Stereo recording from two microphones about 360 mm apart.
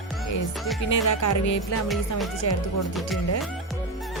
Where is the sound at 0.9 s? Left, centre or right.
Left.